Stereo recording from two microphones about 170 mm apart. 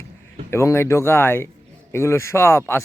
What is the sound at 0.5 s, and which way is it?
A man's voice, 15° left (ahead or behind).